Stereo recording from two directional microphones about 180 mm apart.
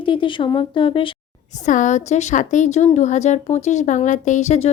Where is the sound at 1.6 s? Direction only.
45° left (ahead or behind).